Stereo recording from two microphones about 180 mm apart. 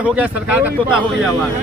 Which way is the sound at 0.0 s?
10° right (ahead or behind).